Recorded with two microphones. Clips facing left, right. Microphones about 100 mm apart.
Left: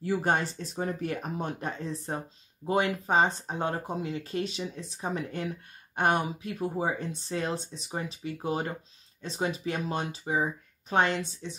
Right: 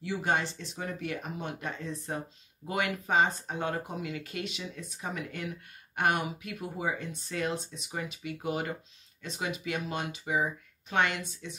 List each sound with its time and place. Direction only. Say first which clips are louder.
0.0 s speech: left 3 dB; 40° left (ahead or behind)